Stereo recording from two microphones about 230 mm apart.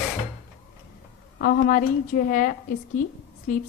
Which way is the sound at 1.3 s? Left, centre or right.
Left.